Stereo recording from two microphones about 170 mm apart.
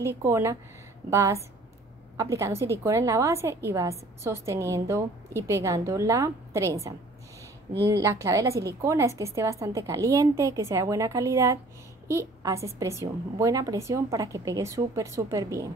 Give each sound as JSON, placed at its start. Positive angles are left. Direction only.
{"t": 0.2, "sound": "a woman's voice", "side_deg": -15}